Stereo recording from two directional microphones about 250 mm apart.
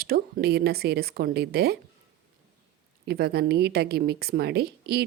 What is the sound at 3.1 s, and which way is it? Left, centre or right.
A woman's voice, right.